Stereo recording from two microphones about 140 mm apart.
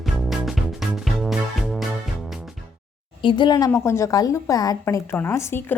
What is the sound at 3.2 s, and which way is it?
A woman's voice, 35° left (ahead or behind).